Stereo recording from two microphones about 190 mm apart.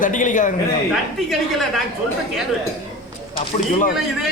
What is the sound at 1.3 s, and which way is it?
Speech, centre (ahead or behind).